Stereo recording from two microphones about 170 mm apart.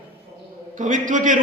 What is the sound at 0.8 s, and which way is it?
Speech, 50° right (ahead or behind).